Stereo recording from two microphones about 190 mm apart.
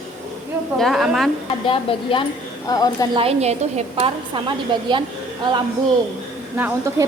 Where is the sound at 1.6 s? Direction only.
25° left (ahead or behind).